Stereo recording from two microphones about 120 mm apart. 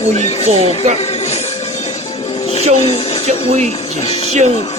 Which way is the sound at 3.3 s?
65° right (ahead or behind).